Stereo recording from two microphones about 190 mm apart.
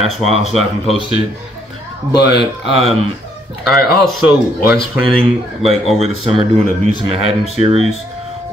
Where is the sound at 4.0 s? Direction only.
Centre (ahead or behind).